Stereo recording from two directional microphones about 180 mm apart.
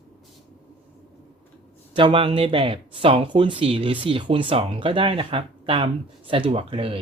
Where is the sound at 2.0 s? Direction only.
30° right (ahead or behind).